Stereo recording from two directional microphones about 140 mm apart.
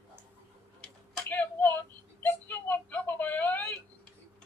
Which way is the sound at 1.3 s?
10° left (ahead or behind).